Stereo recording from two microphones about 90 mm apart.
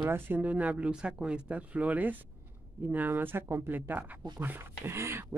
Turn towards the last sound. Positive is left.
turn(degrees=-30)  # may be behind; listen again after turning